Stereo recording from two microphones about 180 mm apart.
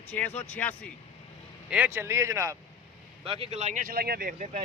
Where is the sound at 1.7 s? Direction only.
10° right (ahead or behind).